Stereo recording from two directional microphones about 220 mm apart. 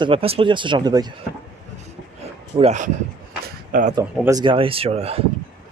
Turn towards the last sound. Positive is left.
turn(degrees=-25)  # may be behind; listen again after turning